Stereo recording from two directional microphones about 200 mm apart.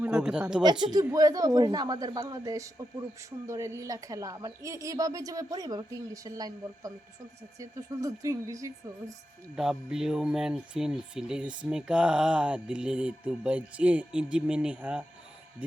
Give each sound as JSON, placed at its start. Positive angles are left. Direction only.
{"t": 0.0, "sound": "speech", "side_deg": -5}
{"t": 0.6, "sound": "speech", "side_deg": -20}
{"t": 9.6, "sound": "speech", "side_deg": 0}